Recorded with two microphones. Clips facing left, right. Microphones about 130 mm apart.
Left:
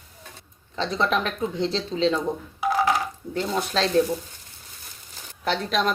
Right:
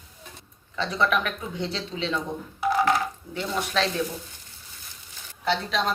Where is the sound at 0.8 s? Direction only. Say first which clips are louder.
Left 1 dB; 35° left (ahead or behind).